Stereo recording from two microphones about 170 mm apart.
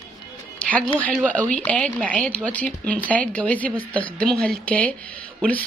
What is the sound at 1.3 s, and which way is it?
Speech, 10° left (ahead or behind).